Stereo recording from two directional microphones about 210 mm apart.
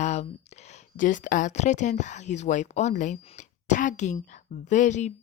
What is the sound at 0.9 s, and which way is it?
Speech, 40° left (ahead or behind).